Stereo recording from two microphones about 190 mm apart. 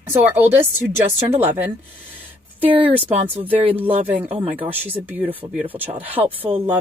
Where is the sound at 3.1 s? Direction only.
30° right (ahead or behind).